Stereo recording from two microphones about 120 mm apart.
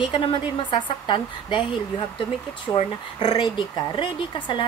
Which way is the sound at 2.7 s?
30° left (ahead or behind).